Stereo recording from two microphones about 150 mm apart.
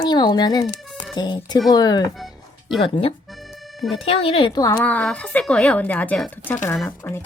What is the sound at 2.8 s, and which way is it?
Speech, 40° left (ahead or behind).